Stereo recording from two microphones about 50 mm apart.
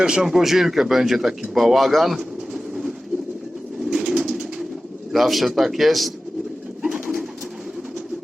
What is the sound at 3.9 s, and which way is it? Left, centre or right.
Bird, centre.